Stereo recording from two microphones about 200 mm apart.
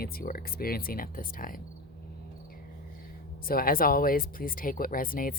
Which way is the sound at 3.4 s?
45° left (ahead or behind).